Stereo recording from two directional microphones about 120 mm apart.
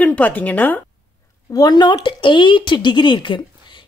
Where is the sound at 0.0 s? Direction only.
15° left (ahead or behind).